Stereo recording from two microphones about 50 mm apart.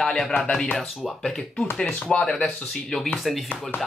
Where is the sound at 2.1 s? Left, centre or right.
Centre.